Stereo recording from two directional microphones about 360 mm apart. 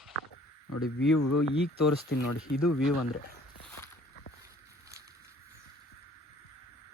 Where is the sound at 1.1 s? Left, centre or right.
Left.